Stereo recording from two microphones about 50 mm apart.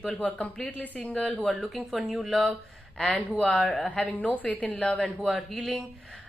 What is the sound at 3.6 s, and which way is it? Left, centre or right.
A woman's voice, left.